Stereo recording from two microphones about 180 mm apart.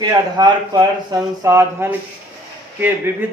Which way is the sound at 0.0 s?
20° right (ahead or behind).